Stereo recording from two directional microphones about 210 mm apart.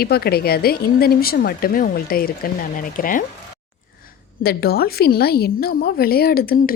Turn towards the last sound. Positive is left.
turn(degrees=45)  # may be behind; listen again after turning